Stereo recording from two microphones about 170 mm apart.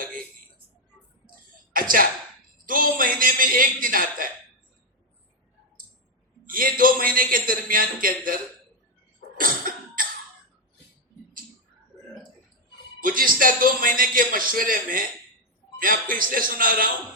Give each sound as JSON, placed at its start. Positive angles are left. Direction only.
{"t": 1.7, "sound": "a man's voice", "side_deg": -55}
{"t": 6.4, "sound": "a man's voice", "side_deg": -55}
{"t": 9.4, "sound": "cough", "side_deg": -55}
{"t": 13.0, "sound": "a man's voice", "side_deg": -55}